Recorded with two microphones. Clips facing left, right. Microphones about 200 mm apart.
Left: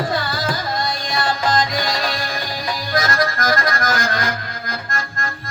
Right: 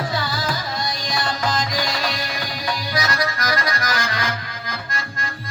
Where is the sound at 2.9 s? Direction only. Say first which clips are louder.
Left 6 dB; 50° left (ahead or behind).